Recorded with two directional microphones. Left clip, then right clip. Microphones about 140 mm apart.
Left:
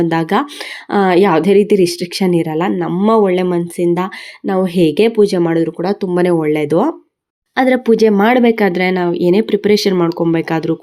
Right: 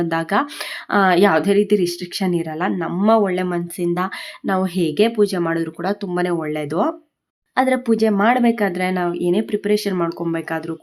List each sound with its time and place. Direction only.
0.0 s speech: 15° left (ahead or behind)